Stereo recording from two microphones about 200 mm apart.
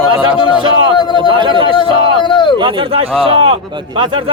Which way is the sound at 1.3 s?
25° right (ahead or behind).